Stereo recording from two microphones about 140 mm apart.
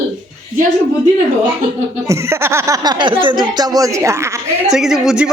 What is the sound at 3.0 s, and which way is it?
Speech, 35° right (ahead or behind).